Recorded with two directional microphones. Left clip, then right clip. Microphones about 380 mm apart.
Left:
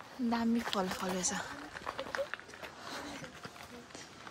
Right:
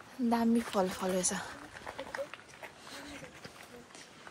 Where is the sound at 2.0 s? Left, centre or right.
Left.